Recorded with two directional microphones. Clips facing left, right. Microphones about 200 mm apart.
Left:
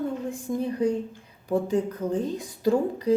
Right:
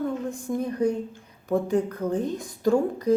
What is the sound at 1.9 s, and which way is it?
A woman's voice, 10° left (ahead or behind).